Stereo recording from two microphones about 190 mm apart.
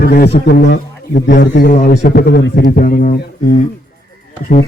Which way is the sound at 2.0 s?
55° left (ahead or behind).